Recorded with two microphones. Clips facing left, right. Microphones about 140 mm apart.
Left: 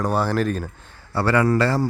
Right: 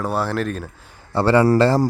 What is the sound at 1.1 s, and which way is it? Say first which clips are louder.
Speech: right 4 dB; 25° right (ahead or behind).